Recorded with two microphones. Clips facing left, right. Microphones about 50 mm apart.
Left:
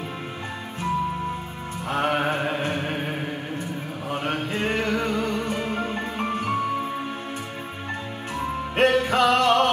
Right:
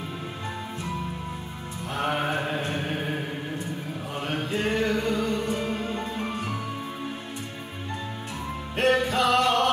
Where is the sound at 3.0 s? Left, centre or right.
Left.